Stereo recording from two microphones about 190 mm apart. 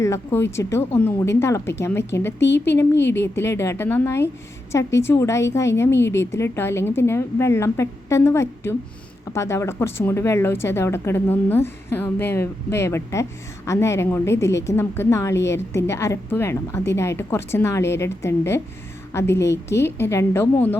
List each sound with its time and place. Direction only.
0.0 s a woman's voice: 15° left (ahead or behind)
2.4 s a woman's voice: 65° left (ahead or behind)
3.3 s a woman's voice: 15° left (ahead or behind)